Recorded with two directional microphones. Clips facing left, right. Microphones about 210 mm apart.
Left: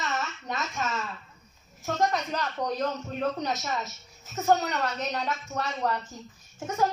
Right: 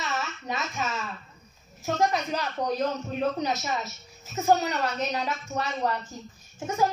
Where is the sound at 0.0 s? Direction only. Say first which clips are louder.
Even; 5° right (ahead or behind).